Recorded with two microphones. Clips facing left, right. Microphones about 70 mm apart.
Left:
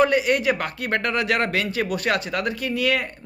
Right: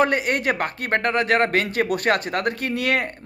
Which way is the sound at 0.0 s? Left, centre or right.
Right.